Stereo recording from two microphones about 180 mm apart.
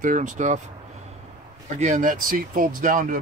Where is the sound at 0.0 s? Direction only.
45° right (ahead or behind).